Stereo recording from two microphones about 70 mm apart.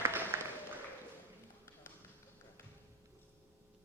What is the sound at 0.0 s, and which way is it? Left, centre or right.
Applause, right.